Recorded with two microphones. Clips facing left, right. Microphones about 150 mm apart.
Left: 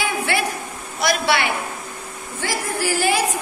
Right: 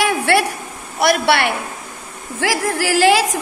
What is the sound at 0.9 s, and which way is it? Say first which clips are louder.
Speech: right 5 dB; 60° right (ahead or behind).